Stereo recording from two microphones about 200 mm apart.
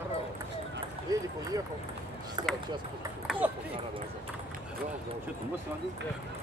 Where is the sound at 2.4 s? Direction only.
20° right (ahead or behind).